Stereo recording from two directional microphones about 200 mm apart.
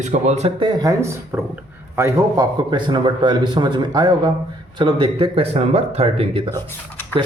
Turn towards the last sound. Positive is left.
turn(degrees=10)  # may be behind; listen again after turning